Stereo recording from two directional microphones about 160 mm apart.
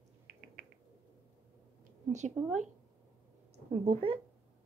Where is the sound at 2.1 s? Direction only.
50° right (ahead or behind).